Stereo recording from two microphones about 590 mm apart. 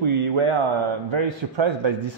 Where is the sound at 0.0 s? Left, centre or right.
Right.